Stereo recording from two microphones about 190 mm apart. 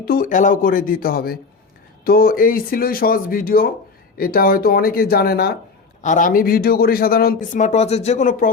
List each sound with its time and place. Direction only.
0.0 s speech: 50° left (ahead or behind)
6.0 s speech: 40° left (ahead or behind)
7.6 s speech: 35° left (ahead or behind)